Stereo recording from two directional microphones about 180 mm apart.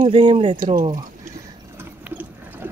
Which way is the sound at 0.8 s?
20° right (ahead or behind).